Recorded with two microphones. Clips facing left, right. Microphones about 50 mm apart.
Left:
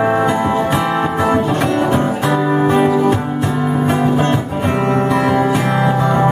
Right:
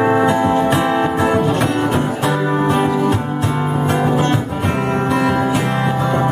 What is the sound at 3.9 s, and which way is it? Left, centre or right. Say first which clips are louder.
Music: even; centre.